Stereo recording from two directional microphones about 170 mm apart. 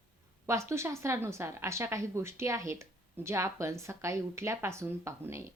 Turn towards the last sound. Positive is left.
turn(degrees=-15)  # may be behind; listen again after turning